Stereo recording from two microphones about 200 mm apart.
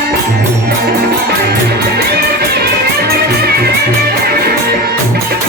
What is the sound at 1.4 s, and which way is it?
Music, 55° right (ahead or behind).